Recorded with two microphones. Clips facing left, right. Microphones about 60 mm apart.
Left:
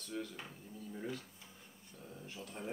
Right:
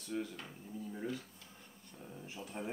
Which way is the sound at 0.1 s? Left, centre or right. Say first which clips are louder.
Right 3 dB; centre.